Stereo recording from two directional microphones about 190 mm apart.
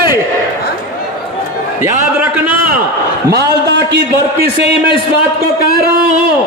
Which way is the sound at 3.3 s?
60° right (ahead or behind).